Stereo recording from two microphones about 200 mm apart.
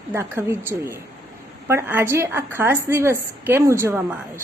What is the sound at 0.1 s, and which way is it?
A woman's voice, 10° right (ahead or behind).